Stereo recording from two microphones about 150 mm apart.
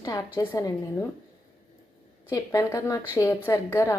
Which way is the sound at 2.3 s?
20° left (ahead or behind).